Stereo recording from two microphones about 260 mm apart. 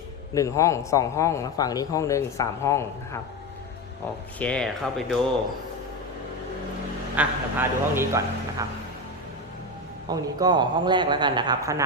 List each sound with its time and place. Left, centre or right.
0.3 s a man's voice: centre
4.4 s speech: centre
7.2 s speech: centre
10.1 s speech: centre